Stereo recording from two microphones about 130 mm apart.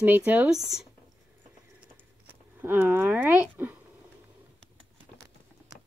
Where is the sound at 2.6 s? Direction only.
20° right (ahead or behind).